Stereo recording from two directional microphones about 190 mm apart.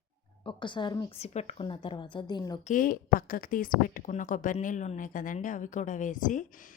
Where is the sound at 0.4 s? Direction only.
25° left (ahead or behind).